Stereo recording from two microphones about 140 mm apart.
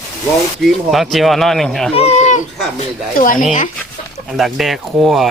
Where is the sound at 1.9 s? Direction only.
50° left (ahead or behind).